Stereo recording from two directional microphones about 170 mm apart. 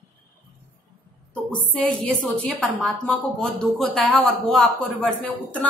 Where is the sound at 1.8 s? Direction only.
Centre (ahead or behind).